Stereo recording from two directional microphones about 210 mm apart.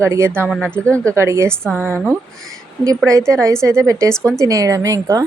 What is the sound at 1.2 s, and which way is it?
Speech, 15° right (ahead or behind).